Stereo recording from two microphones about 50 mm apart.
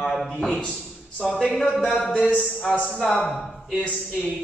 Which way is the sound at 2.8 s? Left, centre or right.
Centre.